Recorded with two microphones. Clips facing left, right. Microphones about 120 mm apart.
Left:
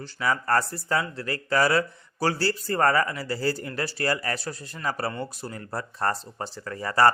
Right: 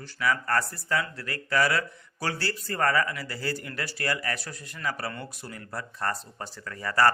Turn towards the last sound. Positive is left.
turn(degrees=30)  # may be behind; listen again after turning